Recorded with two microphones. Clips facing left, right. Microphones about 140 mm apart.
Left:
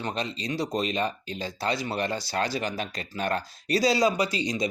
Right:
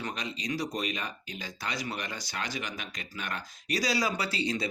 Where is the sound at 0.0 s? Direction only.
30° left (ahead or behind).